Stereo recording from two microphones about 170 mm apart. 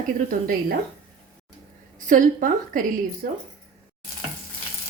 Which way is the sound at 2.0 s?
50° right (ahead or behind).